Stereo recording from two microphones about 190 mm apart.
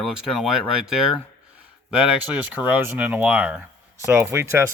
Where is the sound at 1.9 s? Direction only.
5° right (ahead or behind).